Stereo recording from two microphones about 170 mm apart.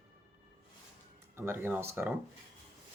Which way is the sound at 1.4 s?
15° right (ahead or behind).